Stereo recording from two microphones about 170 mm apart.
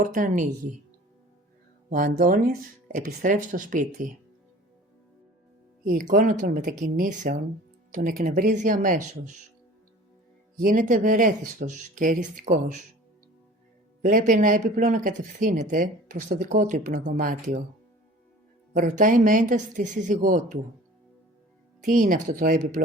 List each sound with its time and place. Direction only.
0.0 s speech: 50° right (ahead or behind)
1.9 s speech: 50° right (ahead or behind)
5.8 s speech: 55° right (ahead or behind)
10.6 s speech: 55° right (ahead or behind)
14.0 s speech: 50° right (ahead or behind)
18.7 s speech: 50° right (ahead or behind)
21.8 s speech: 55° right (ahead or behind)